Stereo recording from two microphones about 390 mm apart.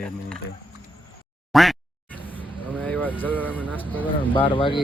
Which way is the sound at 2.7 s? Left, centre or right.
Centre.